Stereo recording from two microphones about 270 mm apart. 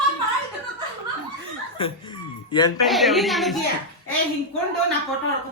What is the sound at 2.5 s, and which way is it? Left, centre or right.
Speech, centre.